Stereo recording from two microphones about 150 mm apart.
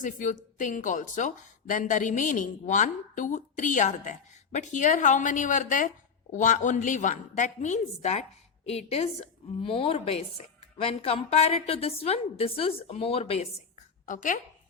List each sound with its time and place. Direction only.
0.0 s a woman's voice: 60° left (ahead or behind); by 13.5 s 45° left (ahead or behind)
14.1 s a woman's voice: 60° left (ahead or behind)